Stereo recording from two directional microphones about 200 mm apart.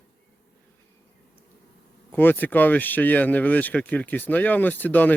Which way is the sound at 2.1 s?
10° left (ahead or behind).